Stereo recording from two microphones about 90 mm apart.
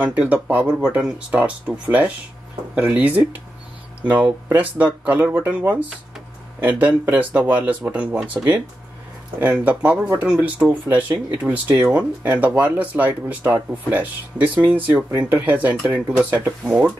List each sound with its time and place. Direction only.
0.0 s speech: 15° right (ahead or behind)
9.4 s speech: 15° right (ahead or behind)